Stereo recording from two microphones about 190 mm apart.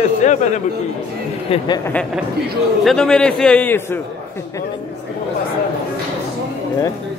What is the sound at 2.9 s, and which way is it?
A man's voice, 5° left (ahead or behind).